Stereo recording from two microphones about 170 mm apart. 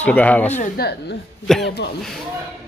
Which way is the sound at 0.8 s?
65° left (ahead or behind).